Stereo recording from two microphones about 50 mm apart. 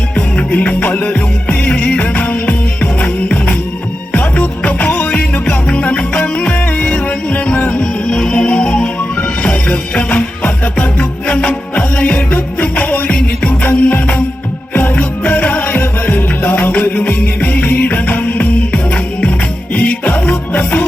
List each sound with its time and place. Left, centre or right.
0.3 s music: left
7.8 s music: centre
14.7 s music: left